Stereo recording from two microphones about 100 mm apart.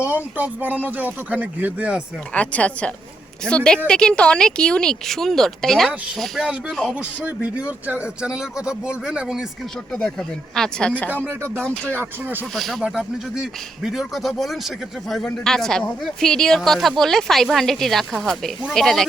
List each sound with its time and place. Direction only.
0.1 s speech: 15° right (ahead or behind)
2.3 s a woman's voice: 15° left (ahead or behind)
6.4 s speech: 10° right (ahead or behind); by 11.1 s 10° left (ahead or behind)
11.1 s speech: 25° right (ahead or behind)
11.6 s speech: 10° left (ahead or behind)
11.9 s speech: 20° right (ahead or behind)
12.5 s a woman's voice: centre (ahead or behind)